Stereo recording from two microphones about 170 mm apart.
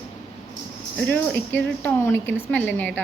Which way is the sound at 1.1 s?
10° left (ahead or behind).